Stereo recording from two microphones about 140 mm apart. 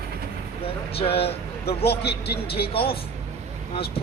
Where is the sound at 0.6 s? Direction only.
45° left (ahead or behind).